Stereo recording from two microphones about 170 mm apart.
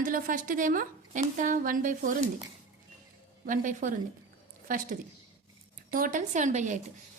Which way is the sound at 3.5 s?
50° right (ahead or behind).